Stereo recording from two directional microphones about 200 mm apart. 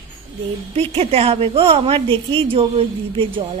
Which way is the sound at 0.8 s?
30° right (ahead or behind).